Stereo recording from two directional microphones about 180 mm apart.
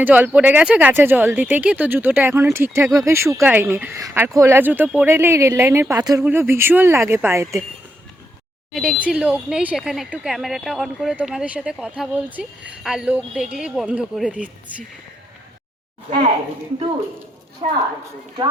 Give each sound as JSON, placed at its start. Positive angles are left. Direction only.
{"t": 0.0, "sound": "speech", "side_deg": -10}
{"t": 8.7, "sound": "speech", "side_deg": -5}
{"t": 17.6, "sound": "a woman's voice", "side_deg": -25}